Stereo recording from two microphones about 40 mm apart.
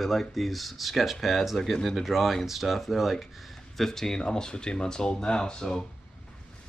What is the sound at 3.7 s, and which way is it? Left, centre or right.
Speech, centre.